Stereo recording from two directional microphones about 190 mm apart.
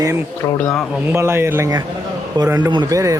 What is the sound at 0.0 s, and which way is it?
Speech, 15° right (ahead or behind).